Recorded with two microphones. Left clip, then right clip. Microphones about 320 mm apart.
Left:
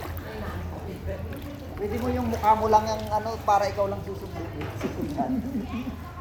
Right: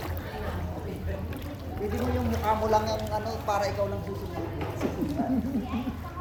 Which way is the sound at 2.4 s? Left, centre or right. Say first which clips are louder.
Left 5 dB; centre.